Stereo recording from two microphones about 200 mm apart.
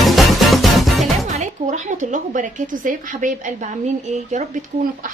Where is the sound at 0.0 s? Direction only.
Centre (ahead or behind).